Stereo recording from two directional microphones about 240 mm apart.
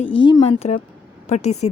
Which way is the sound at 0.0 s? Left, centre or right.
Left.